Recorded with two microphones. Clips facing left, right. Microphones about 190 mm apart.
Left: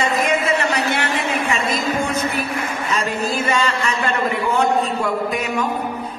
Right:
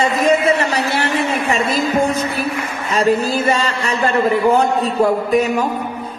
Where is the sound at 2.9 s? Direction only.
35° right (ahead or behind).